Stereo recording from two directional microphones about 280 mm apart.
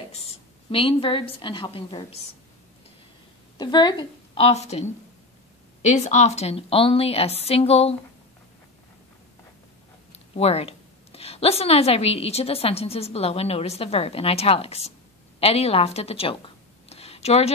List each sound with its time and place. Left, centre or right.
0.7 s a woman's voice: centre
3.5 s a woman's voice: centre
10.3 s a woman's voice: left
16.9 s a sound: left